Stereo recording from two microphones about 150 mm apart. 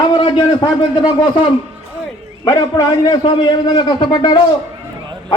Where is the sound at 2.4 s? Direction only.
25° left (ahead or behind).